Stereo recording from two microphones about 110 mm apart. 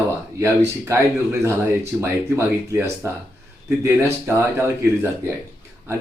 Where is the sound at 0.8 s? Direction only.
25° right (ahead or behind).